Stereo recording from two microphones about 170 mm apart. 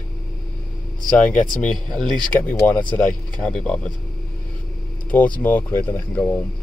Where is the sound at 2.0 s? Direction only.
Centre (ahead or behind).